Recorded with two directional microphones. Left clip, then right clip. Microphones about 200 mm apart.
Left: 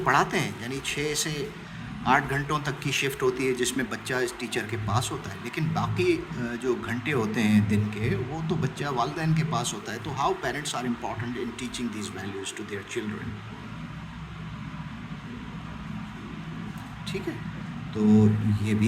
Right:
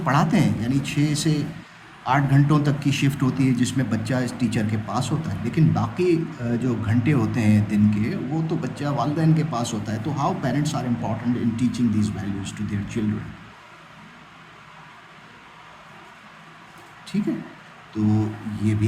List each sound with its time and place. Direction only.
0.0 s a man's voice: 15° left (ahead or behind)
17.9 s a man's voice: 20° left (ahead or behind)